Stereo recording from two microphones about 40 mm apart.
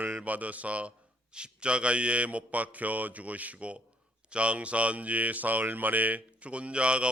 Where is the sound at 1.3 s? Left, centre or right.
Right.